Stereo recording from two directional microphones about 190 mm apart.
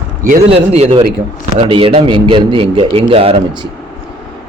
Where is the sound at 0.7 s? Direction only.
30° right (ahead or behind).